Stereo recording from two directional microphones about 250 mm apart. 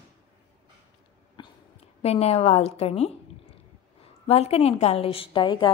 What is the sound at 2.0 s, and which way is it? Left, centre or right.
A woman's voice, left.